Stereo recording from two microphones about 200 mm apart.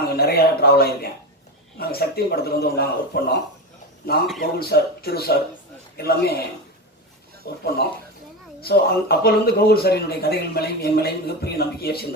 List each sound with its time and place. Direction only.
0.0 s speech: 50° left (ahead or behind)
4.4 s speech: 50° left (ahead or behind)
7.4 s speech: 50° left (ahead or behind)
8.6 s speech: 50° left (ahead or behind)